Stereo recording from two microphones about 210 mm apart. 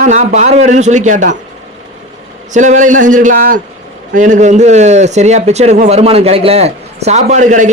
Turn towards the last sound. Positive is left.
turn(degrees=-35)  # may be behind; listen again after turning